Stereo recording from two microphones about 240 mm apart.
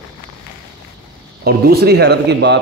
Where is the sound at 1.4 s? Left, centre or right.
Right.